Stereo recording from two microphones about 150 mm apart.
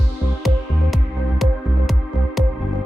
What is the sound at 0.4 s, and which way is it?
Music, centre (ahead or behind).